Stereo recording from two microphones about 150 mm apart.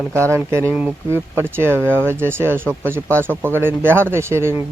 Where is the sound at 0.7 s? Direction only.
10° right (ahead or behind).